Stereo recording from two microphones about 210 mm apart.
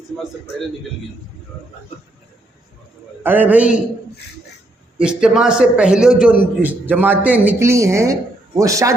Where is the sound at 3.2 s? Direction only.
10° right (ahead or behind).